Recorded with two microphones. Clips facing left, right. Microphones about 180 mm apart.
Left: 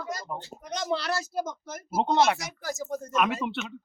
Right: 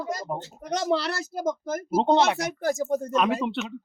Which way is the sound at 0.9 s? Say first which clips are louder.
Right 4 dB; 65° right (ahead or behind).